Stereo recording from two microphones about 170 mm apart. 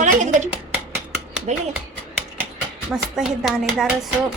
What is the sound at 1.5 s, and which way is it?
Speech, 45° right (ahead or behind).